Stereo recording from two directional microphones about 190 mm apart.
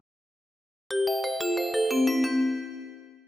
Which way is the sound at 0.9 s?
Centre (ahead or behind).